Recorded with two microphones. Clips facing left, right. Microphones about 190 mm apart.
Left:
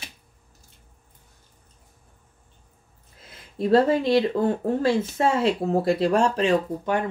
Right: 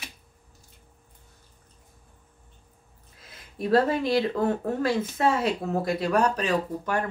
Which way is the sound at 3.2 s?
25° left (ahead or behind).